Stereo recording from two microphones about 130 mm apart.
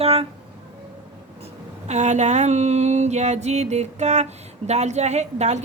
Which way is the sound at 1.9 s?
60° right (ahead or behind).